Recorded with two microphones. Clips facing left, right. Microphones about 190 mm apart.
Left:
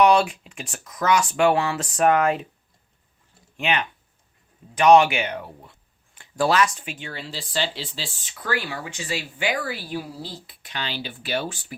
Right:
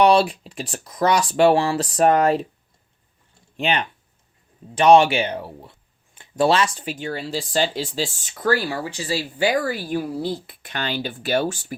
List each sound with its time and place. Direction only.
0.0 s speech: 30° right (ahead or behind)
3.6 s speech: 35° right (ahead or behind)